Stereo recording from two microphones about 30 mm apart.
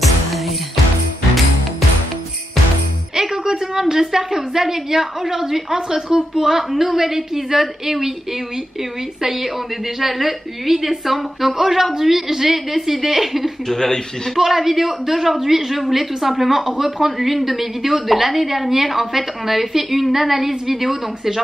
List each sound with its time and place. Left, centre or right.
3.2 s music: right
3.9 s a woman's voice: centre
9.9 s a woman's voice: centre
13.7 s speech: centre
14.3 s a woman's voice: centre